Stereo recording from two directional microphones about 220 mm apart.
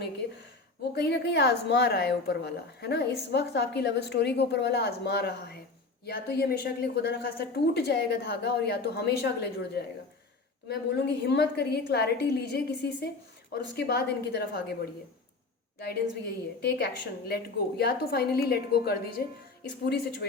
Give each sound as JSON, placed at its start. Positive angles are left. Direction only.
{"t": 0.9, "sound": "a woman's voice", "side_deg": 50}
{"t": 15.9, "sound": "a woman's voice", "side_deg": 45}